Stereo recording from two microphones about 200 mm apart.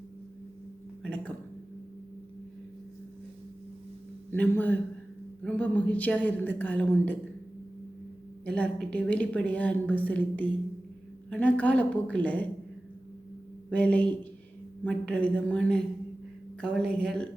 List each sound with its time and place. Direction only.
1.0 s a sound: 5° left (ahead or behind)
4.3 s a woman's voice: 10° left (ahead or behind)
8.4 s a woman's voice: 5° left (ahead or behind)
13.7 s a woman's voice: 5° left (ahead or behind)